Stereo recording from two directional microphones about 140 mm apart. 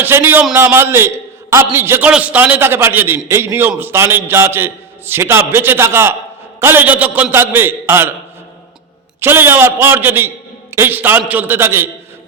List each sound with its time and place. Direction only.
0.0 s a man's voice: 15° right (ahead or behind)
9.2 s a man's voice: 15° right (ahead or behind)